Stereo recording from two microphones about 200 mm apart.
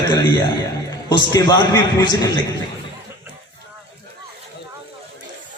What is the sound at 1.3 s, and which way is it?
A man's voice, 20° left (ahead or behind).